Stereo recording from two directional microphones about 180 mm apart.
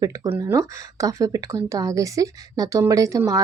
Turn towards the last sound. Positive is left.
turn(degrees=-15)  # may be behind; listen again after turning